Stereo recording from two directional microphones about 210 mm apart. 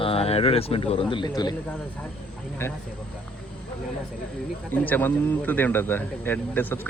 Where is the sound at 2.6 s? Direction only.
10° left (ahead or behind).